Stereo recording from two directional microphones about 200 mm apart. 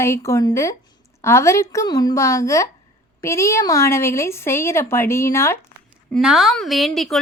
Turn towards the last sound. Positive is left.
turn(degrees=0)  # may be behind; listen again after turning